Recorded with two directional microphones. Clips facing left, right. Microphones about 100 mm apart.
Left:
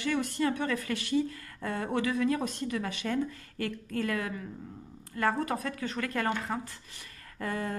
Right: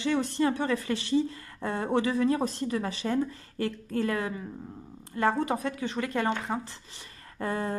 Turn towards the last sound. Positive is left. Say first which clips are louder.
# right 3 dB
turn(degrees=-30)  # may be behind; listen again after turning